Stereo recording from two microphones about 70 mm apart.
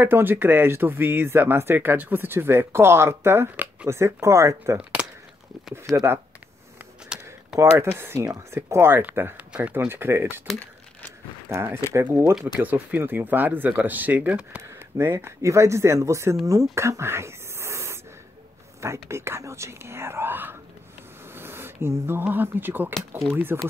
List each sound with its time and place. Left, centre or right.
0.0 s speech: right
3.9 s speech: right
5.0 s a sound: centre
5.9 s speech: centre
7.1 s a sound: centre
8.0 s speech: right
11.4 s speech: right
12.5 s speech: right
14.6 s speech: right